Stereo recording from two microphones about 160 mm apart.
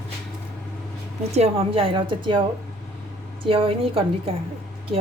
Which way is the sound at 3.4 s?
35° right (ahead or behind).